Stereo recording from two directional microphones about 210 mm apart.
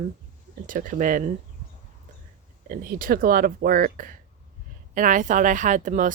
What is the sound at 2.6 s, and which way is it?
Speech, 40° right (ahead or behind).